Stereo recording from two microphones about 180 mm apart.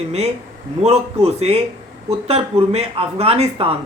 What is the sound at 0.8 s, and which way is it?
Speech, 35° right (ahead or behind).